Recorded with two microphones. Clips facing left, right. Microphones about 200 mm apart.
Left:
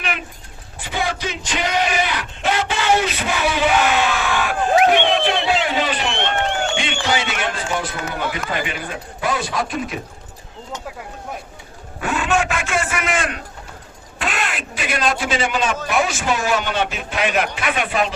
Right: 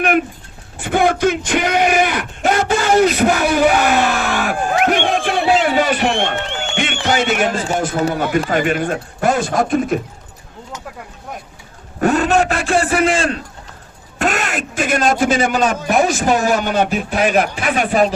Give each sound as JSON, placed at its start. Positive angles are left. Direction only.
{"t": 0.0, "sound": "a sound", "side_deg": -50}
{"t": 6.7, "sound": "music", "side_deg": -55}
{"t": 8.1, "sound": "a man's voice", "side_deg": -45}
{"t": 11.9, "sound": "a man's voice", "side_deg": -40}
{"t": 14.2, "sound": "a man's voice", "side_deg": -45}